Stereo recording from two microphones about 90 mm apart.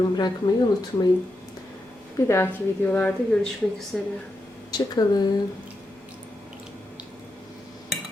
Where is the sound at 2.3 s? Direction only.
25° left (ahead or behind).